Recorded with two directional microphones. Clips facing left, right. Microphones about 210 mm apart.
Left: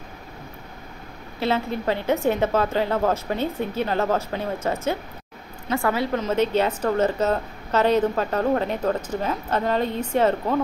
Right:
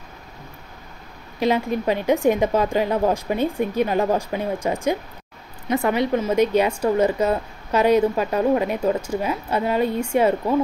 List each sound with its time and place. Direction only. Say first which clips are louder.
1.4 s a woman's voice: right 3 dB; 15° right (ahead or behind)